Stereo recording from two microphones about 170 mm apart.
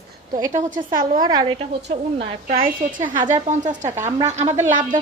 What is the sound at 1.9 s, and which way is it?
Speech, 35° right (ahead or behind).